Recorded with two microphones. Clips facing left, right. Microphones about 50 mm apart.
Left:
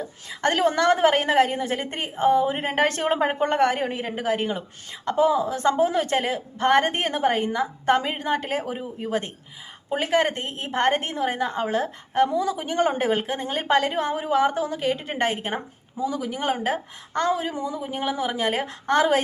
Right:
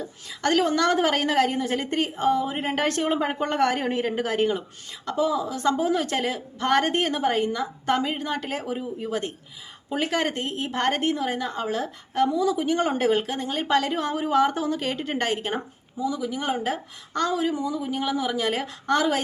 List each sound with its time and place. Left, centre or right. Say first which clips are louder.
0.0 s a woman's voice: left 2 dB; left
3.8 s speech: right 1 dB; centre
4.9 s a woman's voice: left 4 dB; left
8.7 s a woman's voice: right 2 dB; centre
9.0 s a woman's voice: left 5 dB; left
16.0 s a woman's voice: left 1 dB; left